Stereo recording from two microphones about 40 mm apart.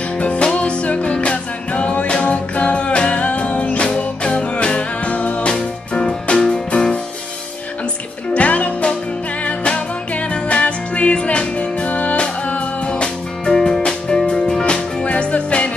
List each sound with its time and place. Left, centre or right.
0.2 s music: left
5.5 s music: left
8.3 s music: left
12.9 s music: centre